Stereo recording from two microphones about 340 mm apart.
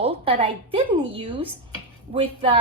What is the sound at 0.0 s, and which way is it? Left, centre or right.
A woman's voice, centre.